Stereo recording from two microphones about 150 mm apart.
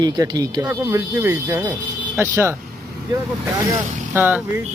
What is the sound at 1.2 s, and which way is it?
Speech, 15° right (ahead or behind).